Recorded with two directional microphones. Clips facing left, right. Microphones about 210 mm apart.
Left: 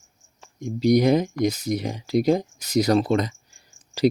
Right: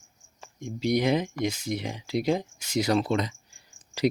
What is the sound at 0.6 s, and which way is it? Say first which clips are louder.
Speech: left 7 dB; 40° left (ahead or behind).